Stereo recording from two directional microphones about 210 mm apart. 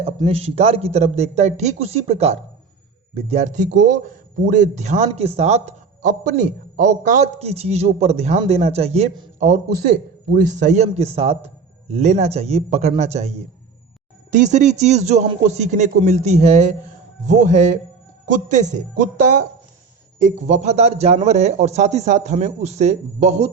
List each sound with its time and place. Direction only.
0.0 s a man's voice: 30° right (ahead or behind)
10.3 s a man's voice: 35° right (ahead or behind)
20.1 s a man's voice: 35° right (ahead or behind)